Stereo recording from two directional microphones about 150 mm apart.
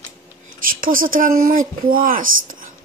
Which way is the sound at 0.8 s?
65° right (ahead or behind).